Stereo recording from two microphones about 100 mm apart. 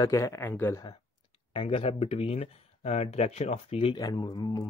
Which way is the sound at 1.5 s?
65° left (ahead or behind).